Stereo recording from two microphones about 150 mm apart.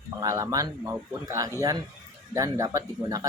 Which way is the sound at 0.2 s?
20° right (ahead or behind).